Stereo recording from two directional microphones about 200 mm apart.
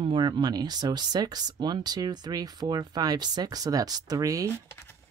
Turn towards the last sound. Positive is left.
turn(degrees=-15)  # may be behind; listen again after turning